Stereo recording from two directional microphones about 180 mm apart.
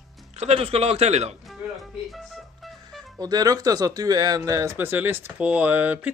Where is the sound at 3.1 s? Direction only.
20° right (ahead or behind).